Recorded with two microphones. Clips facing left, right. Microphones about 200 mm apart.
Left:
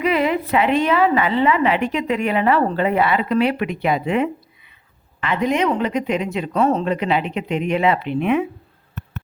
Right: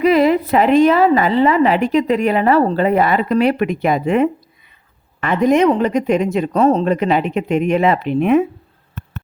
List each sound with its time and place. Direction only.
0.0 s a woman's voice: 40° right (ahead or behind)